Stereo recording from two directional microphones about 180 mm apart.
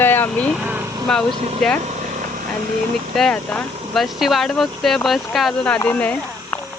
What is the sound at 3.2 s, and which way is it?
Speech, 5° left (ahead or behind).